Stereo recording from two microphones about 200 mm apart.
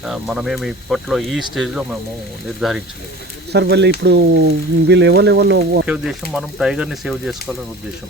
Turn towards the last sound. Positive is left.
turn(degrees=0)  # may be behind; listen again after turning